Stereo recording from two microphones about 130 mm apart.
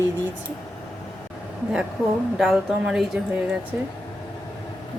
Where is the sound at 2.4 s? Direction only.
5° right (ahead or behind).